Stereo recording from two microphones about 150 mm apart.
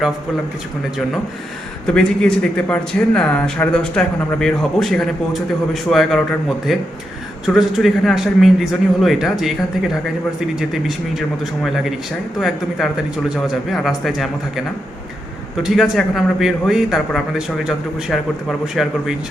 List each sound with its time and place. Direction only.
1.9 s a man's voice: 5° left (ahead or behind)
15.6 s a man's voice: centre (ahead or behind)